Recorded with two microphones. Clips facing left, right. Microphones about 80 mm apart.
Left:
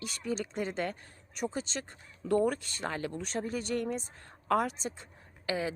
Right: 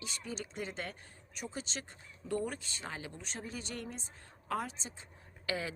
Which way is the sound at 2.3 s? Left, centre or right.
Left.